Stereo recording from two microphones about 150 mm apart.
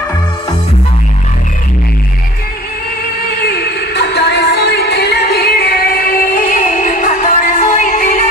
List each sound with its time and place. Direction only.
3.4 s music: 90° left; by 8.3 s 50° left (ahead or behind)